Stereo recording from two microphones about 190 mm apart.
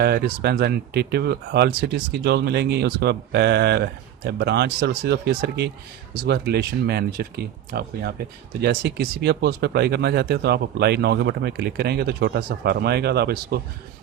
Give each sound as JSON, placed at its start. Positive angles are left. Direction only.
{"t": 0.0, "sound": "speech", "side_deg": -60}